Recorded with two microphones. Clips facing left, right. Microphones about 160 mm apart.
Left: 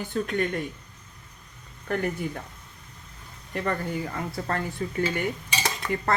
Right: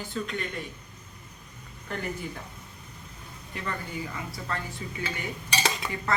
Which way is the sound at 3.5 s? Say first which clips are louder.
Left 7 dB; 55° left (ahead or behind).